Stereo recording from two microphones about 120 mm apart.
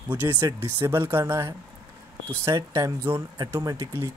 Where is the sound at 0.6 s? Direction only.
20° right (ahead or behind).